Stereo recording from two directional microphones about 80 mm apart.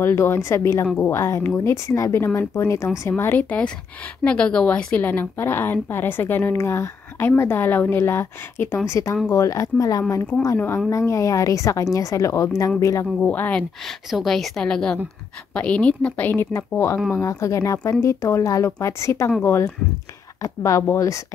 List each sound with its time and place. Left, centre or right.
0.0 s speech: left
3.3 s a woman's voice: centre; by 13.0 s left
13.2 s a woman's voice: centre
13.8 s a woman's voice: centre; by 16.4 s left
17.1 s speech: left
20.4 s a woman's voice: left